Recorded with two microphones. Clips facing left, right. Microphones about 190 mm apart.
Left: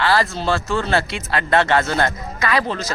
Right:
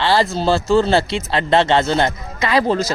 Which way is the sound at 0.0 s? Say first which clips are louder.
Right 3 dB; 25° right (ahead or behind).